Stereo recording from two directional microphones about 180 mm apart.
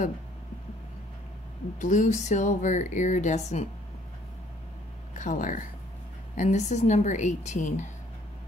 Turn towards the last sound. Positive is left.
turn(degrees=40)  # may be behind; listen again after turning